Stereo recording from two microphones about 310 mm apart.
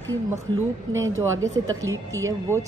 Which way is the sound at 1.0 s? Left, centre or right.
Right.